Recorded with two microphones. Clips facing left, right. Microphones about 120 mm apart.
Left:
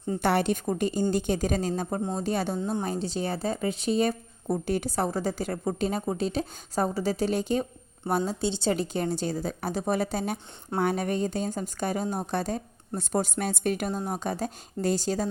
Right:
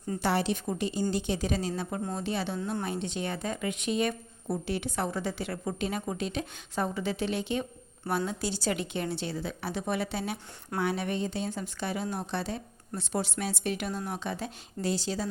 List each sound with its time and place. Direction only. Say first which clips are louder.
0.2 s a woman's voice: left 3 dB; 55° left (ahead or behind); by 7.7 s 40° left (ahead or behind)
8.2 s a woman's voice: left 4 dB; 25° left (ahead or behind)
8.7 s a woman's voice: left 4 dB; 40° left (ahead or behind)